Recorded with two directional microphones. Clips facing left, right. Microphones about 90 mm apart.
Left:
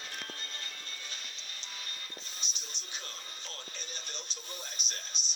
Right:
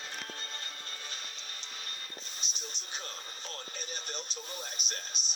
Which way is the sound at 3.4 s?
35° right (ahead or behind).